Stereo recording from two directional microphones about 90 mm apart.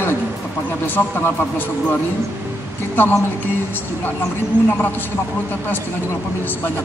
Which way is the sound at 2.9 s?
25° left (ahead or behind).